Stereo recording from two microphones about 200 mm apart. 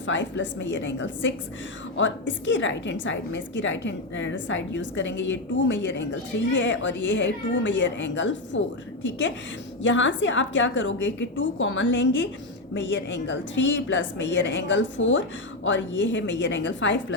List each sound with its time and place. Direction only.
0.0 s a woman's voice: 65° left (ahead or behind)
9.8 s a woman's voice: 65° left (ahead or behind)